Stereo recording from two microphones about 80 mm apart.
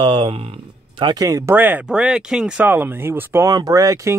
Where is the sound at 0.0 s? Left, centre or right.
Right.